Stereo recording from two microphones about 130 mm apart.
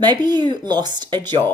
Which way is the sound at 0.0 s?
30° right (ahead or behind).